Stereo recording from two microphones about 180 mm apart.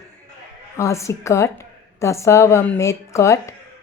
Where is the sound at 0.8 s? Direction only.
15° left (ahead or behind).